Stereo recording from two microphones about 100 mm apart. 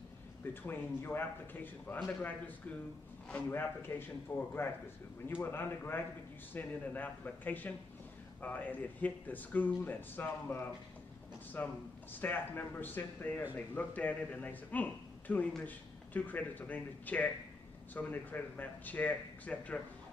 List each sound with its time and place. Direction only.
0.7 s speech: 20° left (ahead or behind)